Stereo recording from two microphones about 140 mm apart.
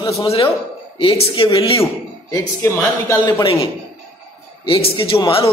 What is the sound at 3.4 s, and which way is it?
A man's voice, 40° left (ahead or behind).